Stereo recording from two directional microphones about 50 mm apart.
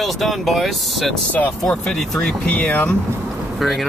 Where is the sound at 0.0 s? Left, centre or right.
Centre.